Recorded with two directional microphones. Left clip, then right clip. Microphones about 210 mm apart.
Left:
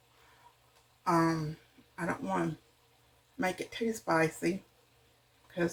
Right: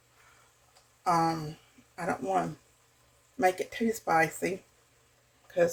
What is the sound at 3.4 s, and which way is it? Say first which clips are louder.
Speech: right 6 dB; 50° right (ahead or behind).